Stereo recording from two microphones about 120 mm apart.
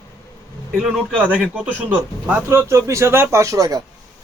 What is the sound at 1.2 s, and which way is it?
A man's voice, 10° right (ahead or behind).